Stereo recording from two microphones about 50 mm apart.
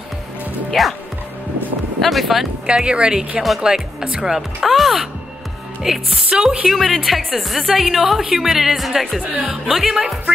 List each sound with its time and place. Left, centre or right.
0.8 s a woman's voice: centre
2.0 s a woman's voice: centre
2.6 s a woman's voice: centre